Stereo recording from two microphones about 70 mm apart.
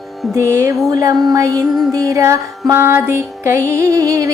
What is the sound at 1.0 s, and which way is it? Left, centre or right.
Music, right.